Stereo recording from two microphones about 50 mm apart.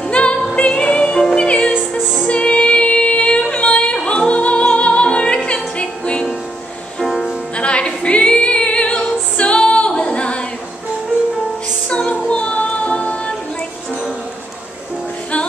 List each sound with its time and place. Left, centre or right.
0.0 s music: left
2.2 s female singing: left
7.0 s music: centre
7.5 s music: left
11.9 s music: centre